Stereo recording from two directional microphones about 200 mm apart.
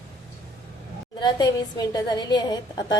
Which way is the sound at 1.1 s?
20° left (ahead or behind).